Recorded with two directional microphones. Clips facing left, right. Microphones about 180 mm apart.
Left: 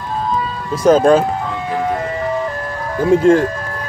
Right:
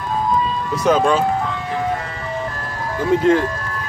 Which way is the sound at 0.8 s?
45° left (ahead or behind).